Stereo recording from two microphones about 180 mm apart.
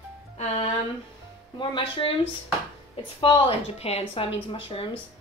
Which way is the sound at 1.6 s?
25° left (ahead or behind).